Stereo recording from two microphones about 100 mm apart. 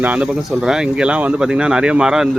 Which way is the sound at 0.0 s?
10° right (ahead or behind).